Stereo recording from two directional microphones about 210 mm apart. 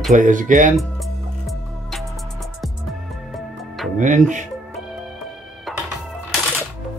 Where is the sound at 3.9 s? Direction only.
35° right (ahead or behind).